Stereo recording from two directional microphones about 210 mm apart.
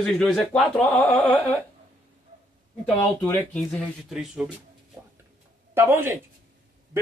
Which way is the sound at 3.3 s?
5° left (ahead or behind).